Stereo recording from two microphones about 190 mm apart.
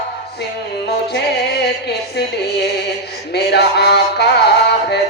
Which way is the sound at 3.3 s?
60° left (ahead or behind).